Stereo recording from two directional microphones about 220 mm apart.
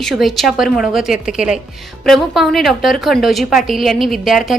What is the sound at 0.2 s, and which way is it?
A woman's voice, centre (ahead or behind).